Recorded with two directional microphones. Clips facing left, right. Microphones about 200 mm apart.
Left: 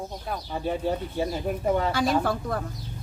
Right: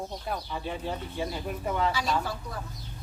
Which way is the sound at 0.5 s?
45° left (ahead or behind).